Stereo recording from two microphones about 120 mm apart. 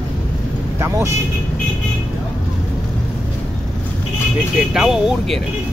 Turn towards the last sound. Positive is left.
turn(degrees=0)  # may be behind; listen again after turning